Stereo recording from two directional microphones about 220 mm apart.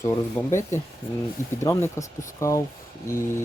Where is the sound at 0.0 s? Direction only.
10° left (ahead or behind).